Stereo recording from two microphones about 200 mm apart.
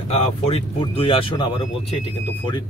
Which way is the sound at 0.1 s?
30° left (ahead or behind).